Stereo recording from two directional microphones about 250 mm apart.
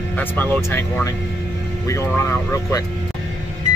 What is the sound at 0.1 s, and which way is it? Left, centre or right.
Speech, centre.